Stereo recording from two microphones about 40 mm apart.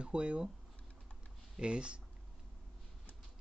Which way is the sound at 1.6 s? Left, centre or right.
Right.